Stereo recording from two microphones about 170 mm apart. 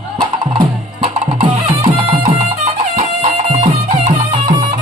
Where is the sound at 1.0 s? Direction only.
35° right (ahead or behind).